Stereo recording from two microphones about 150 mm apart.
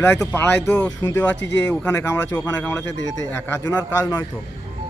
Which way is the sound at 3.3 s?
20° left (ahead or behind).